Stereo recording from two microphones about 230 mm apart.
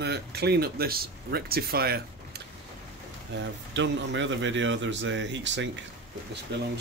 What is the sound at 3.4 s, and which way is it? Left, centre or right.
A man's voice, right.